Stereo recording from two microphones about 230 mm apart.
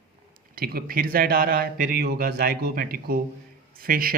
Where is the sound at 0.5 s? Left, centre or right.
Right.